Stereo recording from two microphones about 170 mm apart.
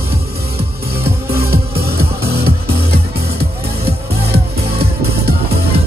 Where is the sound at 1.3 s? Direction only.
65° right (ahead or behind).